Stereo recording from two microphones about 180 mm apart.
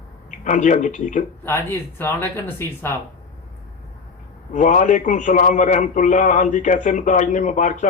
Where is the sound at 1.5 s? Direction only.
10° left (ahead or behind).